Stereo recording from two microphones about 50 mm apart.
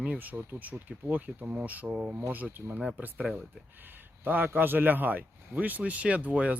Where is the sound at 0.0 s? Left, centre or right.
Right.